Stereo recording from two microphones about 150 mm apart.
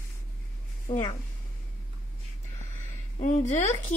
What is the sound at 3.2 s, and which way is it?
Speech, 55° left (ahead or behind).